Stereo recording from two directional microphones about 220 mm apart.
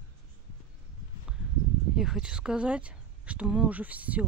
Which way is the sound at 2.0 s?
5° right (ahead or behind).